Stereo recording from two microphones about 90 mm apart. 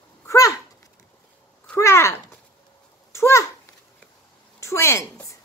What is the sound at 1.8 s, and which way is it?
A child's voice, 30° left (ahead or behind).